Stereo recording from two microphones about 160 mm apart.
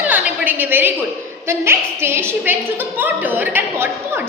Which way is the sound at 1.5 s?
15° right (ahead or behind).